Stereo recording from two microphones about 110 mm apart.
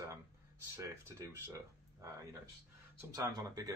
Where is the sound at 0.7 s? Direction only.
30° right (ahead or behind).